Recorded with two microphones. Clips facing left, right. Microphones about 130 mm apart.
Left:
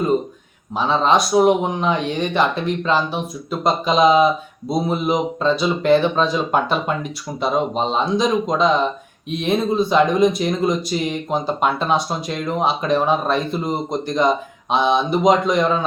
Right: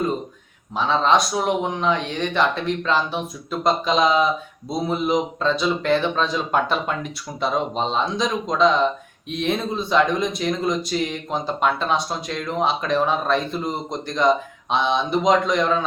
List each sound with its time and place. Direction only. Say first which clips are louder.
0.8 s speech: left 2 dB; 5° left (ahead or behind)